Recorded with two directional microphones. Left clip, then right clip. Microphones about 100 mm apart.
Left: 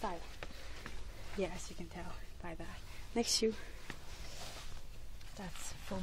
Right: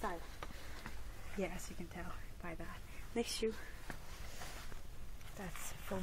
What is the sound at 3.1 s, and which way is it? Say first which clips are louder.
Speech: left 3 dB; 25° left (ahead or behind).